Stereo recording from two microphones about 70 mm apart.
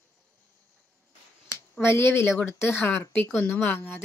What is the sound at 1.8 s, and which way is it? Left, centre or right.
Speech, left.